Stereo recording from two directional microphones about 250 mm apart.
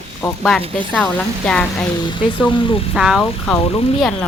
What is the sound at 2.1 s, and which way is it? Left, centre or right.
Speech, centre.